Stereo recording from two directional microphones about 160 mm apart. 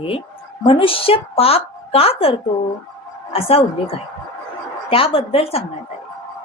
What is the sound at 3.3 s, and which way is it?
Music, 35° left (ahead or behind).